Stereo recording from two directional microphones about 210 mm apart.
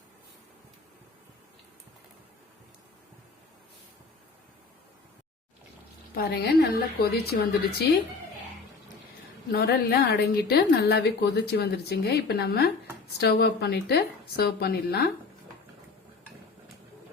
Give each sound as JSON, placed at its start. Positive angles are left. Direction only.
{"t": 6.1, "sound": "a woman's voice", "side_deg": 50}
{"t": 9.5, "sound": "a woman's voice", "side_deg": 45}